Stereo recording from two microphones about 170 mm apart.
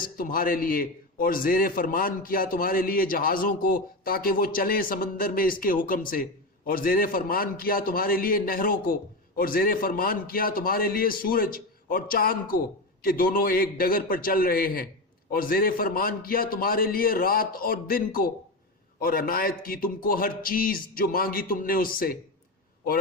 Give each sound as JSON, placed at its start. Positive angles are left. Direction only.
{"t": 0.2, "sound": "a man's voice", "side_deg": 55}